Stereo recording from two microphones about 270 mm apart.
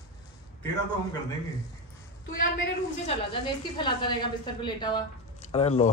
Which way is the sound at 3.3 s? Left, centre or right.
Centre.